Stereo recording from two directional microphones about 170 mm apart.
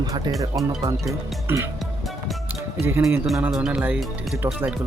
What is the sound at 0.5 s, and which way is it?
Speech, 15° right (ahead or behind).